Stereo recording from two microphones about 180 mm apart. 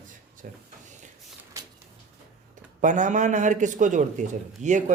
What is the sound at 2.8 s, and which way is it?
A man's voice, 45° right (ahead or behind).